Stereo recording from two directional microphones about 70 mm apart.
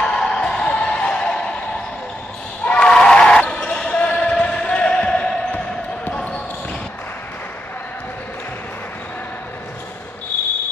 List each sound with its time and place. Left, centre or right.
0.0 s music: centre
2.6 s basketball bounce: centre
6.0 s a sound: left